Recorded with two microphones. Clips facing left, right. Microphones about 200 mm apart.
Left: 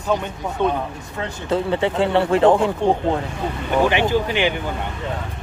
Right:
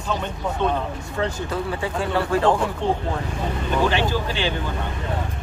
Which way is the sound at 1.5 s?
25° left (ahead or behind).